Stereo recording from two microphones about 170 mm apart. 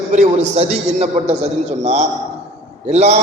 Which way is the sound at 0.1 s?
45° right (ahead or behind).